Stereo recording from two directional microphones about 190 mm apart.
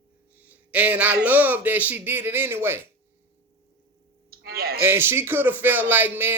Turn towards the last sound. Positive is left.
turn(degrees=-10)  # may be behind; listen again after turning